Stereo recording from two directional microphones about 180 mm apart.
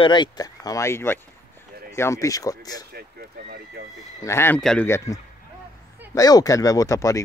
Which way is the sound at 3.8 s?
60° right (ahead or behind).